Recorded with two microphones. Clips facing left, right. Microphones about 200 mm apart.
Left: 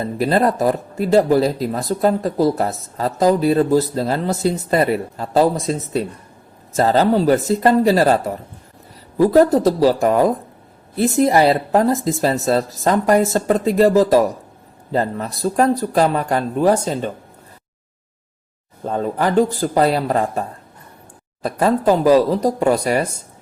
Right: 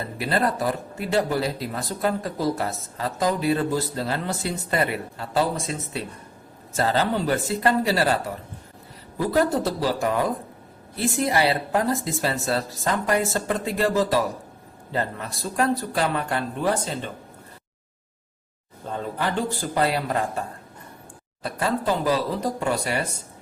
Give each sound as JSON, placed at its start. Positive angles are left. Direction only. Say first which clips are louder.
{"t": 0.0, "sound": "speech", "louder": "left 7 dB", "side_deg": 40}
{"t": 18.9, "sound": "a man's voice", "louder": "left 8 dB", "side_deg": 45}
{"t": 21.4, "sound": "speech", "louder": "left 9 dB", "side_deg": 45}